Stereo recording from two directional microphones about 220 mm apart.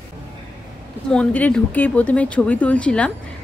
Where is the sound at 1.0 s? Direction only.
5° left (ahead or behind).